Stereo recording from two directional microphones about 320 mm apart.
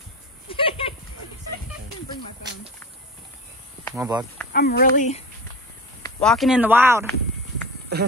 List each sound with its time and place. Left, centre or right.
0.5 s goat: centre
4.0 s speech: centre
4.5 s speech: left
6.2 s speech: centre